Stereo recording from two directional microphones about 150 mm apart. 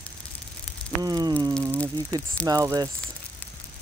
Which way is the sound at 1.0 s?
25° right (ahead or behind).